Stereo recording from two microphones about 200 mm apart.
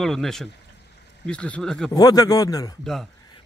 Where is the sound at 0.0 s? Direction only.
Centre (ahead or behind).